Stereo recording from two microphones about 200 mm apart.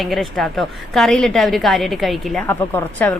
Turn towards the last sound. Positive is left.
turn(degrees=10)  # may be behind; listen again after turning